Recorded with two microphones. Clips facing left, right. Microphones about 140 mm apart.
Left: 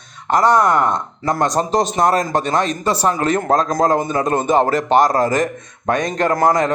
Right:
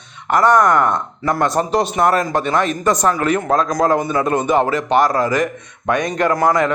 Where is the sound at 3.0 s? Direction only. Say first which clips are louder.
Left 2 dB; 25° left (ahead or behind).